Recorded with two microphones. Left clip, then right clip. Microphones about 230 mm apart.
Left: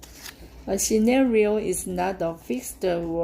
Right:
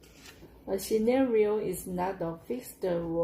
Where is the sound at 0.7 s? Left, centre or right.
Left.